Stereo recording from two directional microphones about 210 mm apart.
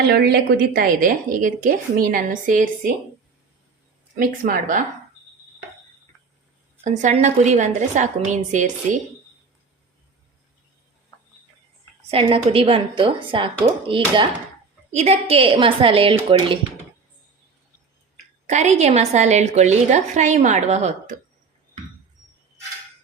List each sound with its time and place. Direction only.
0.1 s a woman's voice: 50° right (ahead or behind)
4.1 s a woman's voice: 40° right (ahead or behind)
6.8 s a woman's voice: 35° right (ahead or behind)
12.1 s a woman's voice: 25° right (ahead or behind)
18.4 s a woman's voice: 35° right (ahead or behind)